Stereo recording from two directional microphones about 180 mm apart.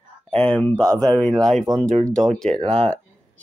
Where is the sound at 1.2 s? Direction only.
5° left (ahead or behind).